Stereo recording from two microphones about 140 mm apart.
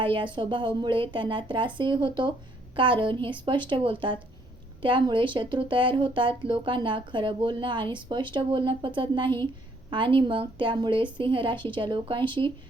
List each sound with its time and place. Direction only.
0.0 s speech: 35° right (ahead or behind)